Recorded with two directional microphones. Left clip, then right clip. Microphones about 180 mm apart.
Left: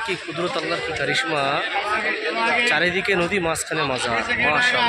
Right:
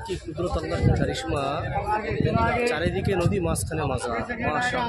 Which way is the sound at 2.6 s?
10° left (ahead or behind).